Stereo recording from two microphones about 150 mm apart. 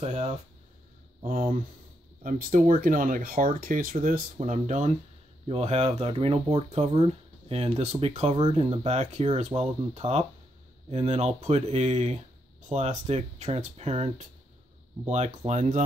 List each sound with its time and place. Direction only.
0.0 s speech: 45° right (ahead or behind)
1.2 s speech: 65° right (ahead or behind); by 15.8 s 50° right (ahead or behind)